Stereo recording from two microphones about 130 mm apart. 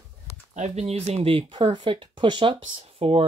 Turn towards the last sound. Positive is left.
turn(degrees=-50)  # may be behind; listen again after turning